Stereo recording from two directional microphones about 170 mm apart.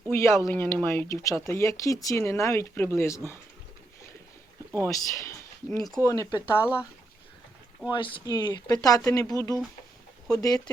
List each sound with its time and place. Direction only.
0.1 s speech: 15° left (ahead or behind)
4.9 s speech: 20° left (ahead or behind)
6.3 s speech: 10° right (ahead or behind)
7.9 s speech: 30° left (ahead or behind)
10.2 s speech: 20° left (ahead or behind)